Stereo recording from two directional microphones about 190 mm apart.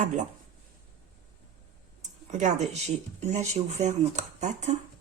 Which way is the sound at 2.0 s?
40° right (ahead or behind).